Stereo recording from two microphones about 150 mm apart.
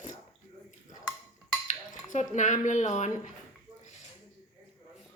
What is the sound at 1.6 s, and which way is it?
Speech, 55° left (ahead or behind).